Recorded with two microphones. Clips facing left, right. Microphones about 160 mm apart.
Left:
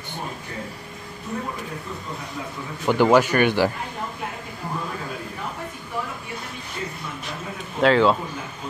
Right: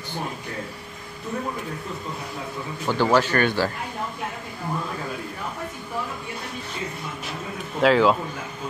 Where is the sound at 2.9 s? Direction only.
15° left (ahead or behind).